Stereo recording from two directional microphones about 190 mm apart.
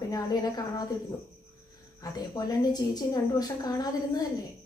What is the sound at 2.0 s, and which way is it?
A woman's voice, 20° left (ahead or behind).